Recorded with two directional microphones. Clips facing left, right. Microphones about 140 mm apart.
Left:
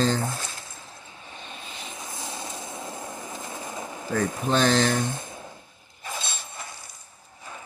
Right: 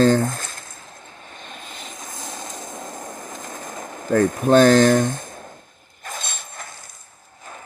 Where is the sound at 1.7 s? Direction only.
45° right (ahead or behind).